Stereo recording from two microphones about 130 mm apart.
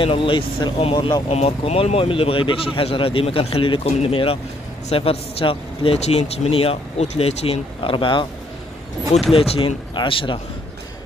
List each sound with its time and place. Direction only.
0.0 s a man's voice: 40° left (ahead or behind)
0.9 s speech: 35° left (ahead or behind)
1.3 s a man's voice: 55° left (ahead or behind)
9.3 s a man's voice: 45° left (ahead or behind)